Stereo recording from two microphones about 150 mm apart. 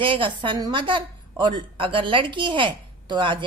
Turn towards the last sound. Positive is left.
turn(degrees=-30)  # may be behind; listen again after turning